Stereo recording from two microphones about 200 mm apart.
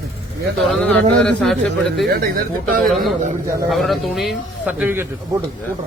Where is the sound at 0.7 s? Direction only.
5° left (ahead or behind).